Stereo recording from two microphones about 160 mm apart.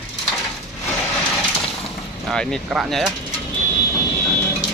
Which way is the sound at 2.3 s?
5° left (ahead or behind).